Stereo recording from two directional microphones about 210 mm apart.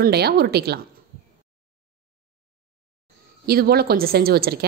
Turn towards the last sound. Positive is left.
turn(degrees=-50)  # may be behind; listen again after turning